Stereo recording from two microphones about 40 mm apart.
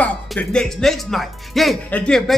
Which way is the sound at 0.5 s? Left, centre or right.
Centre.